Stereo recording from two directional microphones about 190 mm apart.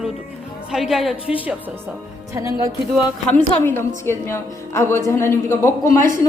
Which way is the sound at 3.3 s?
10° left (ahead or behind).